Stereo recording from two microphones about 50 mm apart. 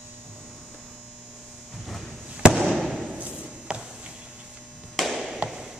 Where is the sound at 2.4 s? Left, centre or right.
Centre.